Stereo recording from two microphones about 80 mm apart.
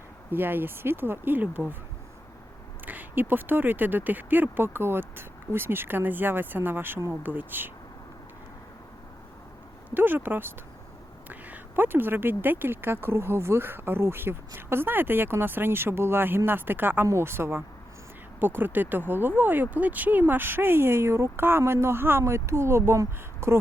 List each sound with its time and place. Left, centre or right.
0.3 s speech: right
2.8 s speech: right
9.9 s speech: right